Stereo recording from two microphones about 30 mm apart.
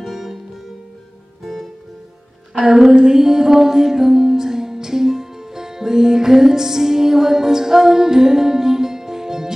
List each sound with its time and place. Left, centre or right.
0.0 s music: centre
1.4 s music: centre
2.7 s music: right